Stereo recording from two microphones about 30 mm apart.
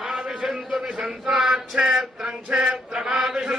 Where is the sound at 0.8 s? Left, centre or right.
Right.